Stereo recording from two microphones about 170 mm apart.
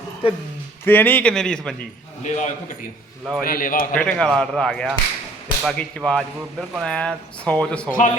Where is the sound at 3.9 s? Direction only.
5° left (ahead or behind).